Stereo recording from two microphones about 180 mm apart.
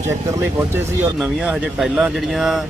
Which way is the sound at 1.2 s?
Centre (ahead or behind).